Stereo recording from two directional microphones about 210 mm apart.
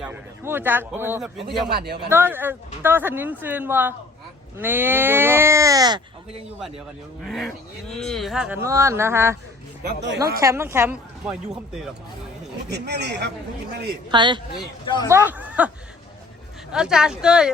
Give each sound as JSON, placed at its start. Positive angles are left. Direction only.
{"t": 0.0, "sound": "speech", "side_deg": -10}
{"t": 1.7, "sound": "speech", "side_deg": -45}
{"t": 2.0, "sound": "speech", "side_deg": -10}
{"t": 7.3, "sound": "speech", "side_deg": 0}
{"t": 10.4, "sound": "speech", "side_deg": -10}
{"t": 12.6, "sound": "speech", "side_deg": -50}
{"t": 14.1, "sound": "speech", "side_deg": -20}
{"t": 14.8, "sound": "speech", "side_deg": 20}
{"t": 15.1, "sound": "speech", "side_deg": -10}
{"t": 16.7, "sound": "speech", "side_deg": -5}